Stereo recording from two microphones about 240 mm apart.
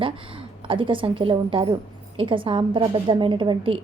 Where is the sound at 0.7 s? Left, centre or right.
Right.